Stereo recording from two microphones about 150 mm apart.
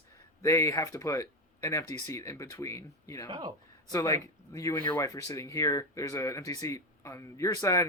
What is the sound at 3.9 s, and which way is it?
Speech, 20° left (ahead or behind).